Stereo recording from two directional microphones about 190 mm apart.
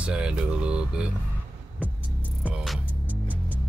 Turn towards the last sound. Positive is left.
turn(degrees=-10)  # may be behind; listen again after turning